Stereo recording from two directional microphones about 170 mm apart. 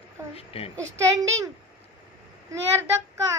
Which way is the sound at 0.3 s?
35° left (ahead or behind).